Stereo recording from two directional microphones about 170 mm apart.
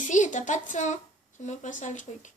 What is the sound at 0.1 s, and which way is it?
Speech, 45° left (ahead or behind).